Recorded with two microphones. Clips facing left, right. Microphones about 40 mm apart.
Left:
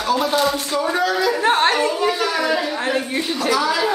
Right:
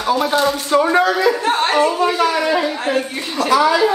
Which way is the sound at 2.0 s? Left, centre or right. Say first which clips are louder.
Right 3 dB; right.